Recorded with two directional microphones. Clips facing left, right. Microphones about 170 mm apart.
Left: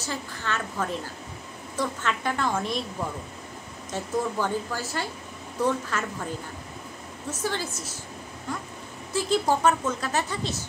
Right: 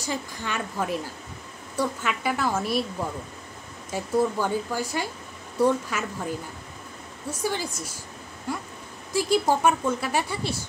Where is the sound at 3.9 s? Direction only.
10° right (ahead or behind).